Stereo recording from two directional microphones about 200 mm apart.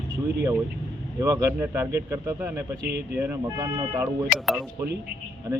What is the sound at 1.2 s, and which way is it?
Speech, 15° right (ahead or behind).